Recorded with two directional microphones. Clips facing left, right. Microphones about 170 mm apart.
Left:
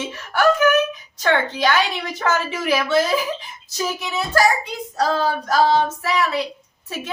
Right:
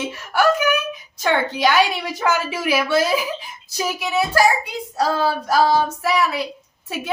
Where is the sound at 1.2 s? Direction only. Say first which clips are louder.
Right 1 dB; 10° right (ahead or behind).